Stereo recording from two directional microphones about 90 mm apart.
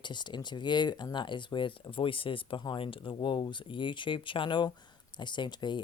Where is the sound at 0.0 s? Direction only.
55° left (ahead or behind).